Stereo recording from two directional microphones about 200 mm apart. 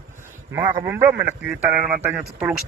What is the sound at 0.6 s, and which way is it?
Speech, 20° right (ahead or behind).